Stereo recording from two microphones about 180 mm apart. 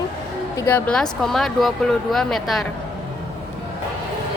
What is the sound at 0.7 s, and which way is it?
Speech, 5° left (ahead or behind).